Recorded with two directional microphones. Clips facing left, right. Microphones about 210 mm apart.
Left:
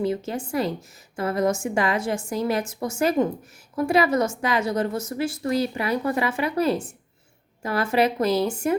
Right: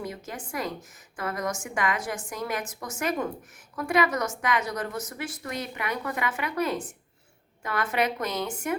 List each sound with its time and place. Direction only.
0.0 s a woman's voice: 30° left (ahead or behind)